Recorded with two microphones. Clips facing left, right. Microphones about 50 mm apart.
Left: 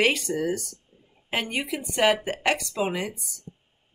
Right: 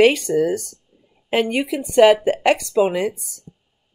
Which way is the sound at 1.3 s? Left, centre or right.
Centre.